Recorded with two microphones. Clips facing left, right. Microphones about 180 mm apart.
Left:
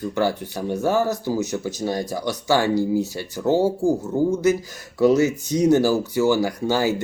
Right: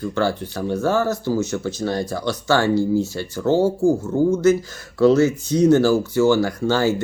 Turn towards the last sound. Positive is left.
turn(degrees=15)  # may be behind; listen again after turning